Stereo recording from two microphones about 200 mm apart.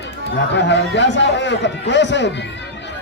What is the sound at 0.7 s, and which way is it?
A man's voice, 60° left (ahead or behind).